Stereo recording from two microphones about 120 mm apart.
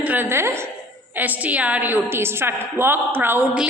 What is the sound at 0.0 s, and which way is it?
A woman's voice, 15° right (ahead or behind).